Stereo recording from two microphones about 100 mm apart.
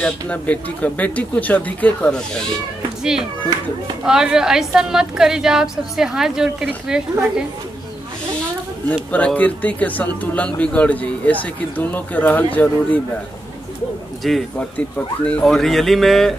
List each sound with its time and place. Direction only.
0.0 s speech: 15° left (ahead or behind)
3.0 s a woman's voice: 5° right (ahead or behind)
8.8 s speech: 15° left (ahead or behind)
14.2 s a woman's voice: centre (ahead or behind)
14.6 s a woman's voice: 15° left (ahead or behind)